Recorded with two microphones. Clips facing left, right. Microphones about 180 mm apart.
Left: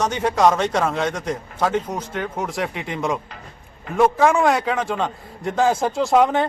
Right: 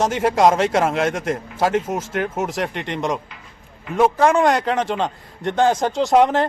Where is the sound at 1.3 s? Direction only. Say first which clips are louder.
Right 2 dB; 5° right (ahead or behind).